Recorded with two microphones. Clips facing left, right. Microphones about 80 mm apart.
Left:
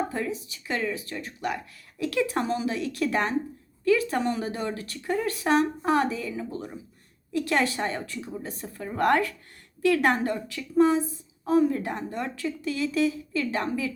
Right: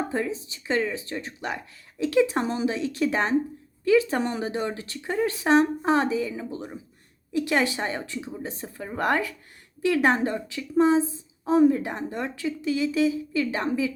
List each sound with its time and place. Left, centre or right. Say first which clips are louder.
0.1 s speech: right 3 dB; right
4.2 s speech: even; right
4.4 s speech: right 2 dB; right